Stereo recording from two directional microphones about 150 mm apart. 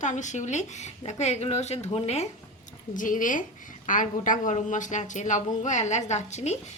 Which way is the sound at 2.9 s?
60° left (ahead or behind).